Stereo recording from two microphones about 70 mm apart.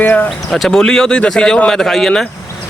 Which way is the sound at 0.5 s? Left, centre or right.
Centre.